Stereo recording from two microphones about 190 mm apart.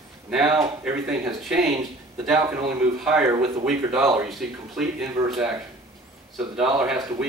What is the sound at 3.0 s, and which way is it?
Speech, 5° right (ahead or behind).